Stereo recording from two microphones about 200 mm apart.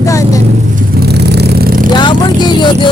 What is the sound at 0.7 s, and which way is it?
Vehicle, 55° right (ahead or behind).